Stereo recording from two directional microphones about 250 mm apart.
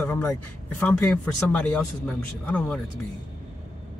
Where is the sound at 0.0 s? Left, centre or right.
Centre.